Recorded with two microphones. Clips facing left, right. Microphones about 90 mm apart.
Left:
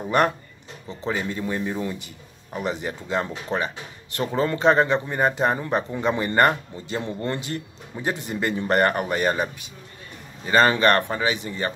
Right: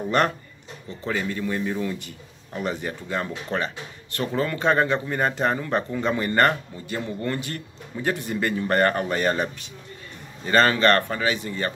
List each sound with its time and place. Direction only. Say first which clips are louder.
0.8 s a man's voice: even; 20° left (ahead or behind)